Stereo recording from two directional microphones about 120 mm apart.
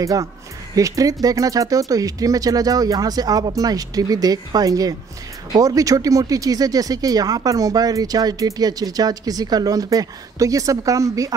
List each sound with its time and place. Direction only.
0.0 s speech: 30° right (ahead or behind)